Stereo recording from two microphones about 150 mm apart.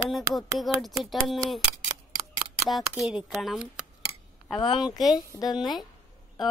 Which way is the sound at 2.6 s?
Centre (ahead or behind).